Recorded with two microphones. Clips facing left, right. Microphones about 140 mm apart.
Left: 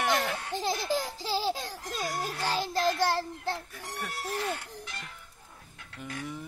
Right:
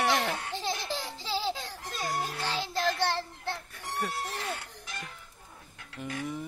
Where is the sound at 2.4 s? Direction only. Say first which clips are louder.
Left 3 dB; 40° left (ahead or behind).